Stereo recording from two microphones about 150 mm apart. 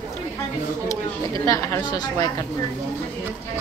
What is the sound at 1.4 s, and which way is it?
Speech, 20° left (ahead or behind).